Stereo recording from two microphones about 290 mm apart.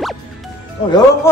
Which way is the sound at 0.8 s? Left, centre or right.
Centre.